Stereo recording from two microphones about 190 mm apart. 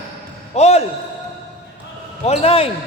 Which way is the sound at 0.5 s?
35° left (ahead or behind).